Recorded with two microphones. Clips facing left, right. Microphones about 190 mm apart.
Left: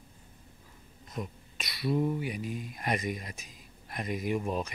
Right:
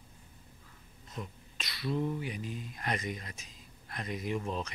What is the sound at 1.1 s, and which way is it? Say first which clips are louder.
Speech: left 4 dB; 15° left (ahead or behind).